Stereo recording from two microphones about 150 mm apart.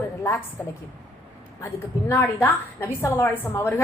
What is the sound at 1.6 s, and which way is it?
A woman's voice, 15° left (ahead or behind).